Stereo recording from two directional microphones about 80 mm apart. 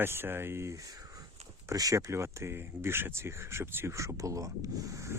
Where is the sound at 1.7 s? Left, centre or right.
Right.